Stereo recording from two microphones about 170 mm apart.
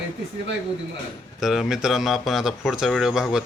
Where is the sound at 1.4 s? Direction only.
Centre (ahead or behind).